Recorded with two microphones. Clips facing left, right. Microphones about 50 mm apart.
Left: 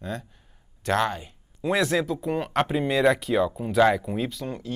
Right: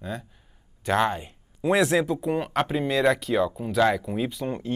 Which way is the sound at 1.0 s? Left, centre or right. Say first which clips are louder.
Right 2 dB; right.